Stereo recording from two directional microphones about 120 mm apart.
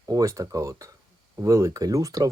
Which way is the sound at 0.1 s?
30° right (ahead or behind).